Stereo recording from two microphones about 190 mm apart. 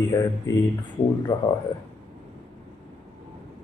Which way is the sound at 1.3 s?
20° left (ahead or behind).